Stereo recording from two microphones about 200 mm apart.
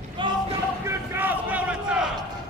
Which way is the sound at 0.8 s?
10° right (ahead or behind).